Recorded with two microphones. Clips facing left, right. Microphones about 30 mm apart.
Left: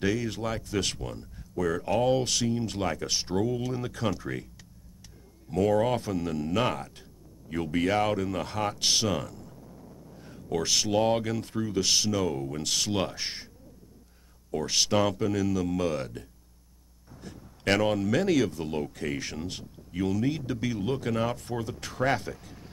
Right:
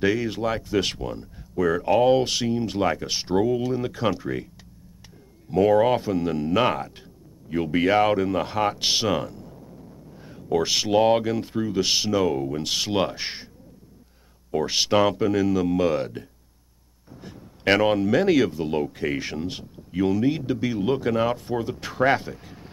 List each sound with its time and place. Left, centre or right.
0.0 s speech: centre
5.5 s speech: centre
9.7 s a sound: centre
10.1 s speech: centre
14.5 s speech: right